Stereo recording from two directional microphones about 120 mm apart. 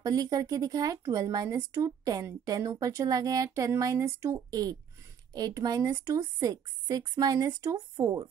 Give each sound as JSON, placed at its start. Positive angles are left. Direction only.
{"t": 0.0, "sound": "speech", "side_deg": -30}